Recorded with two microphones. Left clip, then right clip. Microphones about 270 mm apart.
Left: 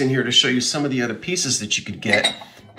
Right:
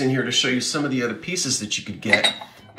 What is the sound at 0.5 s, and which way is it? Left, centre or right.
Speech, centre.